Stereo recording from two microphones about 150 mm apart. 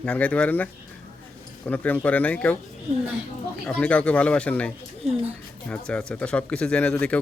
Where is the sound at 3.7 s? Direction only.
10° left (ahead or behind).